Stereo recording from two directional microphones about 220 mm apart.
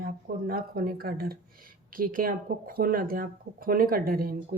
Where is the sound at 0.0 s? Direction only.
40° right (ahead or behind).